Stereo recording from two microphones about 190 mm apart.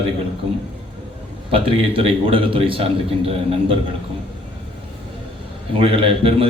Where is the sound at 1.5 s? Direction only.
30° right (ahead or behind).